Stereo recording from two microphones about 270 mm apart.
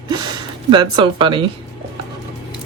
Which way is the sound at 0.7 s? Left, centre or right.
Centre.